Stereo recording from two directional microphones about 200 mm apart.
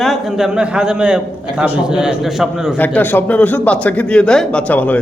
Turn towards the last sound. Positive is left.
turn(degrees=10)  # may be behind; listen again after turning